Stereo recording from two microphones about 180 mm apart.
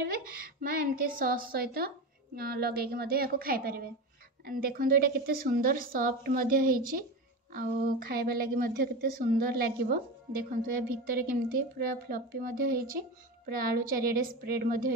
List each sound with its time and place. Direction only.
0.0 s a woman's voice: 50° right (ahead or behind)